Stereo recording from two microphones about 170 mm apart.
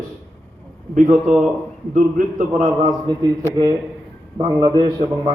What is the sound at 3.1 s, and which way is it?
A man's voice, 25° right (ahead or behind).